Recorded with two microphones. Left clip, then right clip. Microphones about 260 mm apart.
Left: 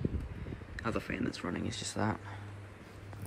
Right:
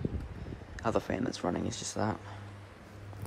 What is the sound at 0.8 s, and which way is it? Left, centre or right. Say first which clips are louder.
Speech: right 5 dB; centre.